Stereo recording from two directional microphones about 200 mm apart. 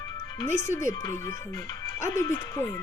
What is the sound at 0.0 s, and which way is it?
Music, 20° left (ahead or behind).